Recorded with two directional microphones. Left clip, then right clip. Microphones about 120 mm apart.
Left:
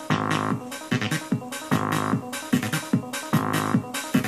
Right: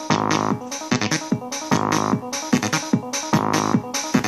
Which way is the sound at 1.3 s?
25° right (ahead or behind).